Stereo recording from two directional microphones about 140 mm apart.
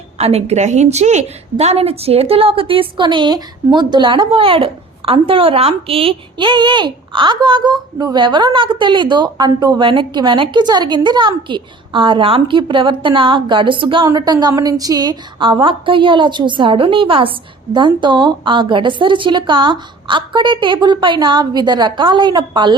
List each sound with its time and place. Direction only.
0.2 s a woman's voice: 50° right (ahead or behind); by 22.7 s 30° right (ahead or behind)